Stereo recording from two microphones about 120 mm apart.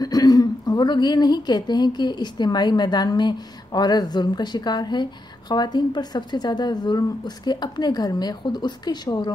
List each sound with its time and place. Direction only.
0.0 s a woman's voice: 35° left (ahead or behind)